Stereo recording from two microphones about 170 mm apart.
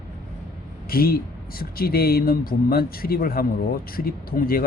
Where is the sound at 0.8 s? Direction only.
60° left (ahead or behind).